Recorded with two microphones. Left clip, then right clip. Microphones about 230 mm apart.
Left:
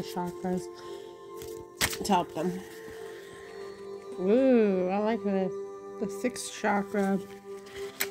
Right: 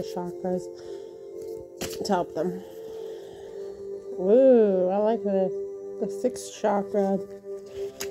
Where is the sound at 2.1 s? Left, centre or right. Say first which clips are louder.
Right 3 dB; left.